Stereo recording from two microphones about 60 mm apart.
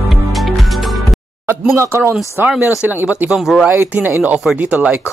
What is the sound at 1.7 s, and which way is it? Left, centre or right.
Speech, right.